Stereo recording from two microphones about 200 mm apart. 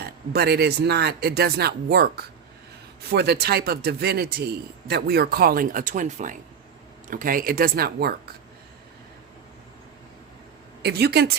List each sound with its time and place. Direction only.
0.0 s a man's voice: 55° right (ahead or behind)
10.8 s a man's voice: 55° right (ahead or behind)